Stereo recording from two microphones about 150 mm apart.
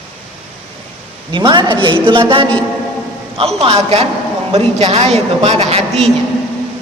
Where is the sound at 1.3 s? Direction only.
30° right (ahead or behind).